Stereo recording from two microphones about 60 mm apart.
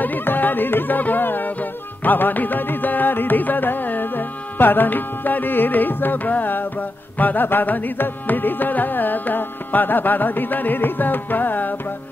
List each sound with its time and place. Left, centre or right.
0.0 s music: left
7.2 s carnatic music: left